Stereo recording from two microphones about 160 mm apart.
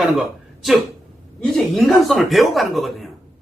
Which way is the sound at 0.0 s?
Centre (ahead or behind).